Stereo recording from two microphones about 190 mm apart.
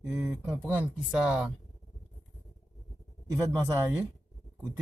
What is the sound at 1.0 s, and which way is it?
Speech, centre (ahead or behind).